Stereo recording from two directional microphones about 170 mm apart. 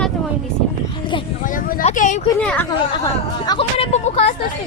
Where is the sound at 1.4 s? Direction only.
55° left (ahead or behind).